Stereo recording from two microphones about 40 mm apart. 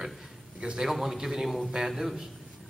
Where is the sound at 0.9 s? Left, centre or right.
Centre.